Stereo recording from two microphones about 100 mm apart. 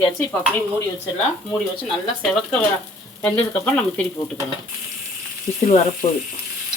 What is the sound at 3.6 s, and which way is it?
Speech, 5° left (ahead or behind).